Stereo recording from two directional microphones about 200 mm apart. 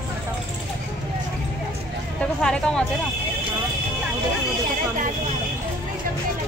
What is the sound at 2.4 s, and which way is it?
Speech, 5° left (ahead or behind).